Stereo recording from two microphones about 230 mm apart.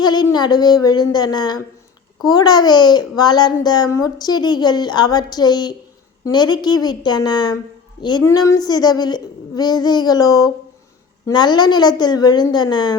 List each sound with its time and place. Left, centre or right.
0.0 s a child's voice: centre